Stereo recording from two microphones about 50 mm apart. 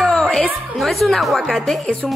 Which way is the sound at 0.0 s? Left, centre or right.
Centre.